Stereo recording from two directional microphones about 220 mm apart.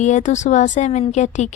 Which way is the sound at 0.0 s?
35° left (ahead or behind).